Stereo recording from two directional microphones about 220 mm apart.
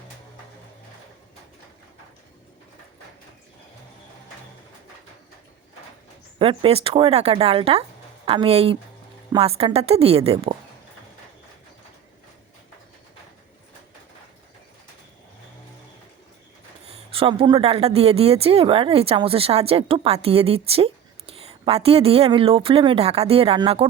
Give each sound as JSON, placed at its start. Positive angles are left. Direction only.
{"t": 6.4, "sound": "speech", "side_deg": -25}
{"t": 17.1, "sound": "speech", "side_deg": -25}